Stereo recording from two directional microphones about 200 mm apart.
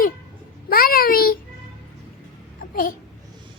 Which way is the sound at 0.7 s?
45° left (ahead or behind).